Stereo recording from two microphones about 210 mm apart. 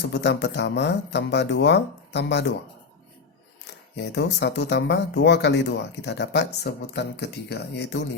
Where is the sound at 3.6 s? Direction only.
55° left (ahead or behind).